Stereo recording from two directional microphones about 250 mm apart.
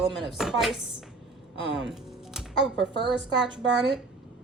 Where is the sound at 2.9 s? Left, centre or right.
Left.